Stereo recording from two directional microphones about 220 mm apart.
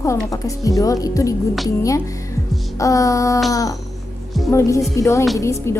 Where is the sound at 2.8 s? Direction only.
15° left (ahead or behind).